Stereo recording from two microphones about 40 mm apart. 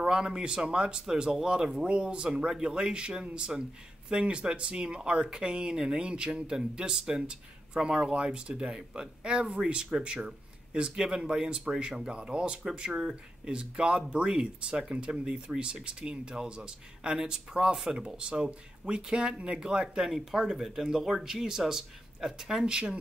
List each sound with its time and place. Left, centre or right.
0.1 s speech: right
20.1 s speech: centre
22.7 s speech: right